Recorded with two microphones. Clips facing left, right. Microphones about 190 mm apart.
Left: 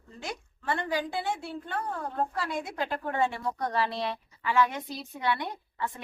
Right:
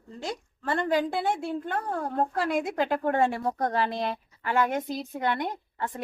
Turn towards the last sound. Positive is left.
turn(degrees=-40)  # may be behind; listen again after turning